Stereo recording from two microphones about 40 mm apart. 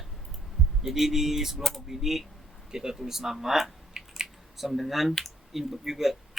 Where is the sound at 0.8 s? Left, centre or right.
Centre.